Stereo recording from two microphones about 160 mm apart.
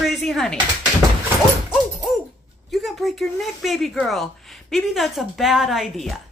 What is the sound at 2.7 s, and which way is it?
Speech, centre (ahead or behind).